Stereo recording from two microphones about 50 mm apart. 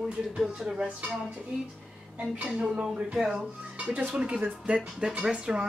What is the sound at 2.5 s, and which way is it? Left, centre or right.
Speech, right.